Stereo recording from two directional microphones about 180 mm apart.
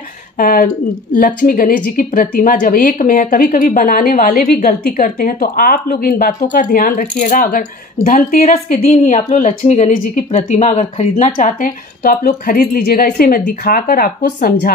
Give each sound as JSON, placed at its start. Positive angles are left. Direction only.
{"t": 0.4, "sound": "speech", "side_deg": 50}